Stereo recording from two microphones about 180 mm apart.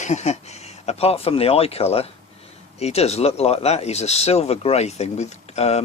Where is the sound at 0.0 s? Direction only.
40° left (ahead or behind).